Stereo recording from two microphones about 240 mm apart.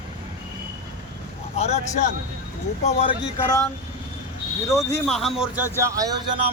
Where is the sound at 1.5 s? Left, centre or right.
Left.